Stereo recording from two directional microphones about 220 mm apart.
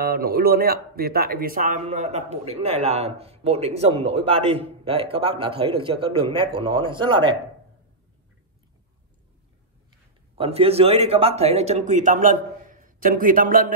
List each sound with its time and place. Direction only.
0.0 s speech: 45° right (ahead or behind); by 7.3 s 20° right (ahead or behind)
10.3 s speech: 25° right (ahead or behind)